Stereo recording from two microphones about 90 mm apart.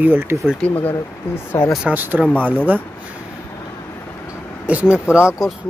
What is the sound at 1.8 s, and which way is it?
Speech, 20° right (ahead or behind).